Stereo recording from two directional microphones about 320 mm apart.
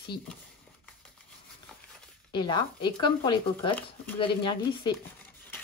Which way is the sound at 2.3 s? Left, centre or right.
Centre.